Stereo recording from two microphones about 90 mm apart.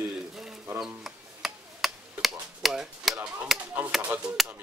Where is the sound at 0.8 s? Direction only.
5° right (ahead or behind).